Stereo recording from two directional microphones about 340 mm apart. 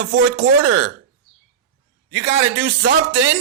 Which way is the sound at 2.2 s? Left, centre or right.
Right.